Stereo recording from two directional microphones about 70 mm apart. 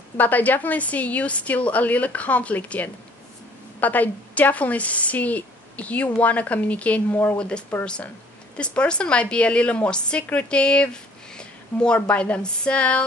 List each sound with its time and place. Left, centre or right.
0.2 s a woman's voice: left